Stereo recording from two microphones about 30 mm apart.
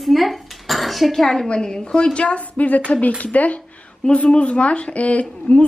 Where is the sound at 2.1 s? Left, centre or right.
Left.